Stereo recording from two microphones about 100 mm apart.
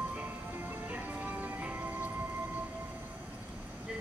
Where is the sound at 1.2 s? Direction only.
20° right (ahead or behind).